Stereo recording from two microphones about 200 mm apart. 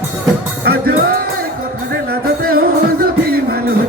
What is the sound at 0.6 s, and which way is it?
Music, 50° right (ahead or behind).